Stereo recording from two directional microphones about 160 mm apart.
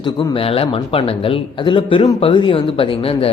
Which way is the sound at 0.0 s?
35° left (ahead or behind).